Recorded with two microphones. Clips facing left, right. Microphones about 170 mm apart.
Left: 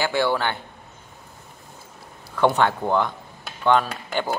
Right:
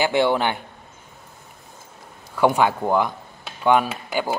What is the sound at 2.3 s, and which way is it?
Speech, 10° right (ahead or behind).